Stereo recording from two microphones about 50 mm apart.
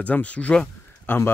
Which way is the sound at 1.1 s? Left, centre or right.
Left.